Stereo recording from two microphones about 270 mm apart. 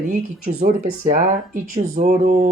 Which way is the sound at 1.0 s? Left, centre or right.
Right.